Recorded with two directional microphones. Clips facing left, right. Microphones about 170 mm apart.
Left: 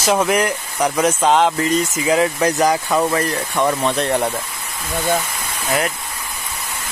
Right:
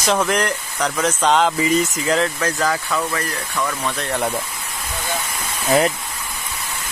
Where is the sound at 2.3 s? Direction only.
20° left (ahead or behind).